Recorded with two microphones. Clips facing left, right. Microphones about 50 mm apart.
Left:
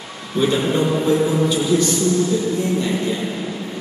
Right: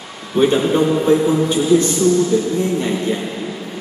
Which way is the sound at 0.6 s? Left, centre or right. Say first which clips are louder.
Right 3 dB; centre.